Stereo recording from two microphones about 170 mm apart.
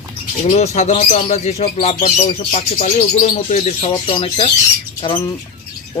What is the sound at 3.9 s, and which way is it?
Speech, 30° left (ahead or behind).